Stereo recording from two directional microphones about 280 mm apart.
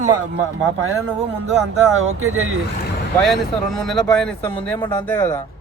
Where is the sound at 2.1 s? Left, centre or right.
Right.